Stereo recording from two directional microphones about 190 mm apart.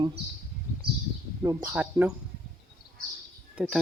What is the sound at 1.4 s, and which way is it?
Speech, 10° right (ahead or behind).